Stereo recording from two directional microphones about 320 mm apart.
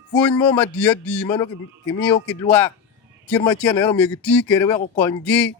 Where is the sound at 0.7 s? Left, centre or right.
Centre.